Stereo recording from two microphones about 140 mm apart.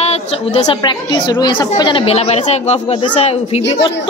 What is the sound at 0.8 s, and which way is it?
A woman's voice, 30° left (ahead or behind).